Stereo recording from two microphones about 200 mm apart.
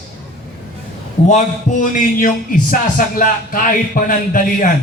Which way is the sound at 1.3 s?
40° left (ahead or behind).